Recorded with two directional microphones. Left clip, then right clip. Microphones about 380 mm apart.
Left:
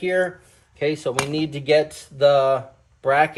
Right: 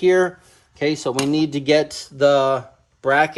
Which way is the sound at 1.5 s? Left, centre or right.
Centre.